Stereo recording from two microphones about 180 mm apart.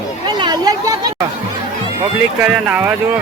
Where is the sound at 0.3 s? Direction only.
25° right (ahead or behind).